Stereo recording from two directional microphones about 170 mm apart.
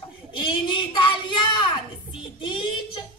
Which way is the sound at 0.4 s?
25° left (ahead or behind).